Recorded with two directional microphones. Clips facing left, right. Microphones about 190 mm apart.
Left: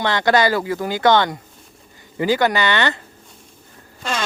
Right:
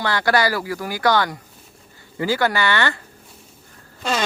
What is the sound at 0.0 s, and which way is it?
Speech, 20° left (ahead or behind).